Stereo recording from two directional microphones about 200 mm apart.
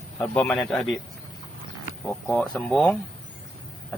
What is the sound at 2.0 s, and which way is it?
Speech, 5° left (ahead or behind).